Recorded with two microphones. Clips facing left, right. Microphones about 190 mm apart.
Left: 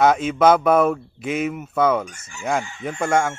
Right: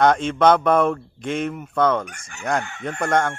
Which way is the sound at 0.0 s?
5° left (ahead or behind).